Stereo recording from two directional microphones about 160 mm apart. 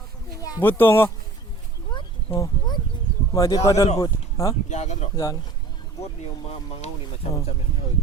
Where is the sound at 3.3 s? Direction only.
20° left (ahead or behind).